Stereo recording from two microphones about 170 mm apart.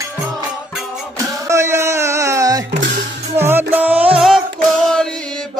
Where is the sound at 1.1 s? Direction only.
15° right (ahead or behind).